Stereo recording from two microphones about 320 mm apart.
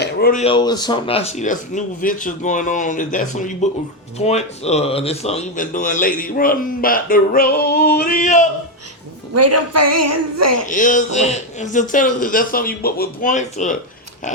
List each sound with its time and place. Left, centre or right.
0.0 s speech: left
9.3 s a woman's voice: right
10.7 s speech: left